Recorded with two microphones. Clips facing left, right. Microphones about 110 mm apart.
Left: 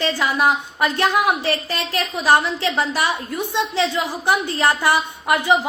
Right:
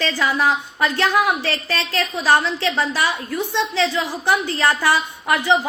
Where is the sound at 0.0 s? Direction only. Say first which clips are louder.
Left 1 dB; 15° left (ahead or behind).